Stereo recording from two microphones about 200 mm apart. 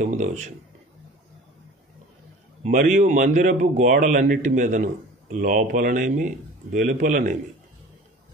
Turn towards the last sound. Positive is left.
turn(degrees=-40)  # may be behind; listen again after turning